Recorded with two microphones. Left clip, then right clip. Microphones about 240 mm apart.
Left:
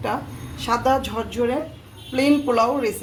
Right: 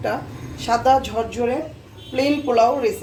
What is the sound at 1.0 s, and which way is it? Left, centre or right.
Speech, left.